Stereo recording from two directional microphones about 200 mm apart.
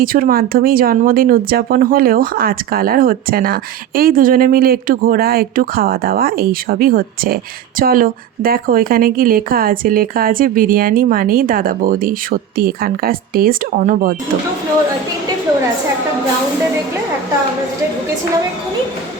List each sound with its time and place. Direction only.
0.0 s speech: 45° right (ahead or behind)